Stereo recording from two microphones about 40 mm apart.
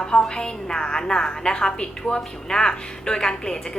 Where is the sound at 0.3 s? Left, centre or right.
Centre.